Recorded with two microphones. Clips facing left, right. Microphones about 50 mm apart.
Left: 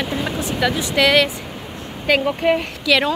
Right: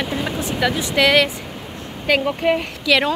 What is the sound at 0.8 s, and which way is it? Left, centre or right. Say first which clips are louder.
Speech: even; right.